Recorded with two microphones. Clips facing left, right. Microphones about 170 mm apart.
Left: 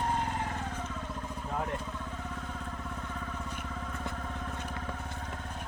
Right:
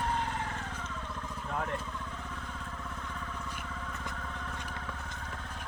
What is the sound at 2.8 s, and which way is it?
Vehicle, 30° left (ahead or behind).